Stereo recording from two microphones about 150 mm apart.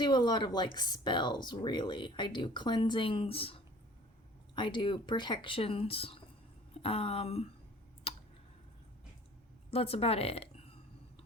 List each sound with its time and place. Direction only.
0.0 s speech: 30° left (ahead or behind)
9.6 s speech: 40° left (ahead or behind)